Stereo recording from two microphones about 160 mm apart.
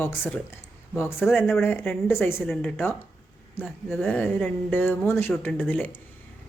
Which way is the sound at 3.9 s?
10° left (ahead or behind).